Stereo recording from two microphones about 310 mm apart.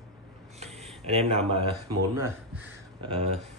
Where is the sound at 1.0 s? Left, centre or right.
Centre.